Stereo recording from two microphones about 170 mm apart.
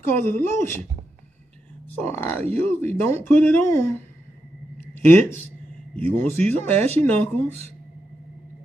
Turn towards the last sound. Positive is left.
turn(degrees=10)  # may be behind; listen again after turning